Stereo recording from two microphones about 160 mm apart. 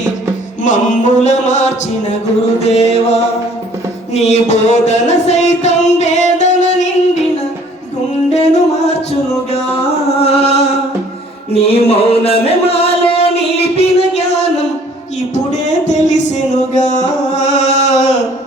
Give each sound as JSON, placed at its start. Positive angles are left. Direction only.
{"t": 0.6, "sound": "music", "side_deg": 50}
{"t": 2.6, "sound": "chant", "side_deg": 40}
{"t": 4.1, "sound": "music", "side_deg": 45}
{"t": 8.3, "sound": "music", "side_deg": 40}
{"t": 15.5, "sound": "music", "side_deg": 45}